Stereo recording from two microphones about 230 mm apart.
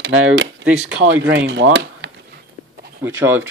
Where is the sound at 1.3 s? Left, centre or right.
Right.